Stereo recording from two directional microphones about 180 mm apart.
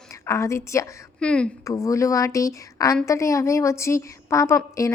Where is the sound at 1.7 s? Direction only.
15° left (ahead or behind).